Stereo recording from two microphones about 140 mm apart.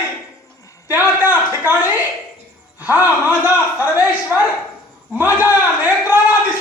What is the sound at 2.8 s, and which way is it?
A man's voice, 15° right (ahead or behind).